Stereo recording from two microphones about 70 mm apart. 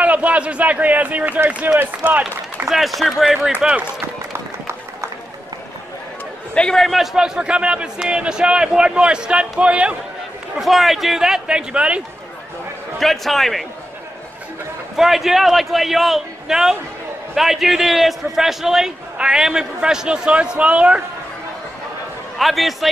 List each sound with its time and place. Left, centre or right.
0.0 s a man's voice: right
2.7 s a man's voice: centre
6.5 s a man's voice: centre
7.2 s a man's voice: centre
10.6 s a man's voice: centre
13.0 s a man's voice: centre
15.0 s a man's voice: centre
22.4 s a man's voice: centre